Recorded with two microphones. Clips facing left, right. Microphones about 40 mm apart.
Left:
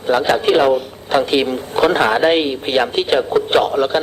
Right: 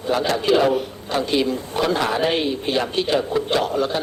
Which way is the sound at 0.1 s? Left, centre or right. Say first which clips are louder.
Left 5 dB; left.